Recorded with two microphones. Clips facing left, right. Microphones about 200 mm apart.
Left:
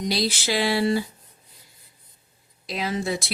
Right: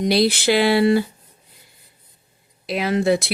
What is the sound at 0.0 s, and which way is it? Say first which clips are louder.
Speech: right 8 dB; 60° right (ahead or behind).